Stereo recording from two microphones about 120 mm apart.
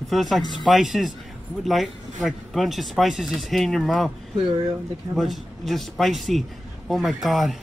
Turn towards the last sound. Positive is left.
turn(degrees=0)  # may be behind; listen again after turning